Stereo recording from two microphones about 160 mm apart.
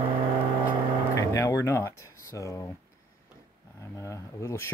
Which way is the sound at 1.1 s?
20° left (ahead or behind).